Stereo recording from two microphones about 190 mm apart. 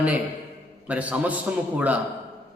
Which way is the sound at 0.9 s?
5° right (ahead or behind).